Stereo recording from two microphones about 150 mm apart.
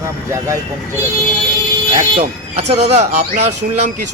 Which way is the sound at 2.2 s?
45° right (ahead or behind).